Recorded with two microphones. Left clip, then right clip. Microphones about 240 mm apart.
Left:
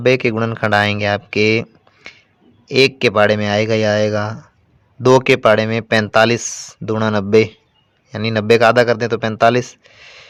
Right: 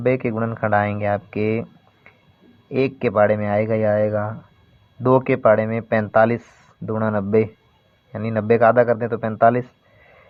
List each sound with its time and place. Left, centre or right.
0.0 s speech: left
2.6 s speech: left